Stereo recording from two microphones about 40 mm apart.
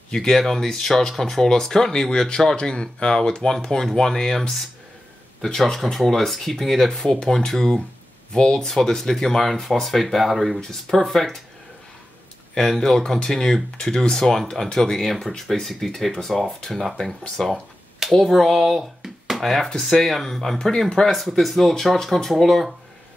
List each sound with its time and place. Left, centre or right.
0.1 s speech: centre
7.2 s speech: centre
12.5 s speech: centre
18.0 s a sound: centre
18.4 s speech: centre
18.7 s speech: centre
21.1 s speech: centre